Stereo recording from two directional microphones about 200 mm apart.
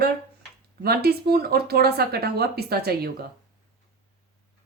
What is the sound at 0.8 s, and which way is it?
A woman's voice, 50° right (ahead or behind).